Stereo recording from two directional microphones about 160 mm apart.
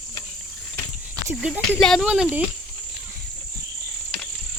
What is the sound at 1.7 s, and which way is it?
Speech, centre (ahead or behind).